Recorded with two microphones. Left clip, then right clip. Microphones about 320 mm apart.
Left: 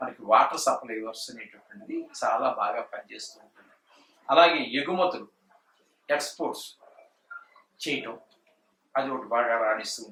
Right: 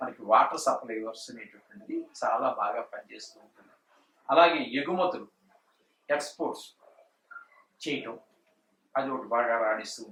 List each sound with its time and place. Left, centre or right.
0.0 s speech: centre
4.3 s speech: centre
6.2 s speech: centre
6.8 s a sound: centre
7.8 s speech: centre